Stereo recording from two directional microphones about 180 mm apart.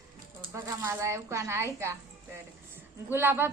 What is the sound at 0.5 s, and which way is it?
A woman's voice, 15° right (ahead or behind).